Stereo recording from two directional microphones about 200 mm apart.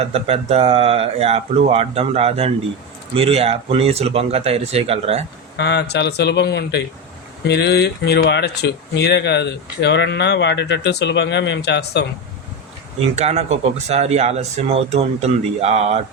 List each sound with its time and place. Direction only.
0.0 s speech: 30° right (ahead or behind)
5.5 s speech: 55° left (ahead or behind)
13.0 s speech: 35° right (ahead or behind)